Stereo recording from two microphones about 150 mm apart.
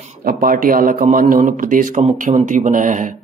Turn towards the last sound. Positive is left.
turn(degrees=-60)  # may be behind; listen again after turning